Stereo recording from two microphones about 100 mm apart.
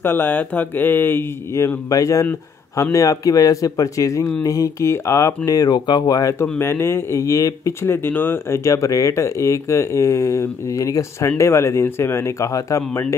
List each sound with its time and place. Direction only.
0.0 s speech: 20° left (ahead or behind); by 6.3 s 40° left (ahead or behind)
6.6 s speech: 25° left (ahead or behind)